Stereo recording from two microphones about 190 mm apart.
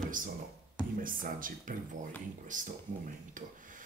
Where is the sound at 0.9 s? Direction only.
45° right (ahead or behind).